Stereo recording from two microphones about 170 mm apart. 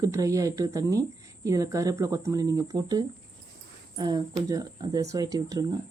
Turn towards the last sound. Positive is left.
turn(degrees=-20)  # may be behind; listen again after turning